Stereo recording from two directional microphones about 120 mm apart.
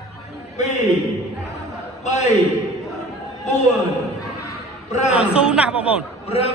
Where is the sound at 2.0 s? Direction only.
65° left (ahead or behind).